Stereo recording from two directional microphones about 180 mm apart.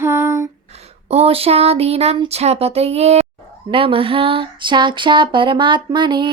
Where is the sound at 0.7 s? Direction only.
35° right (ahead or behind).